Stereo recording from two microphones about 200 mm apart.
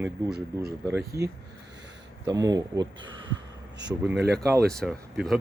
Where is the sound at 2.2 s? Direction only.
20° right (ahead or behind).